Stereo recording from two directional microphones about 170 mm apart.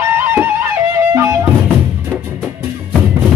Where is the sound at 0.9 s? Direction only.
15° right (ahead or behind).